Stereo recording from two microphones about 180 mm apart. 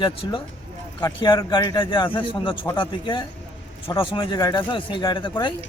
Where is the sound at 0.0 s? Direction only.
25° left (ahead or behind).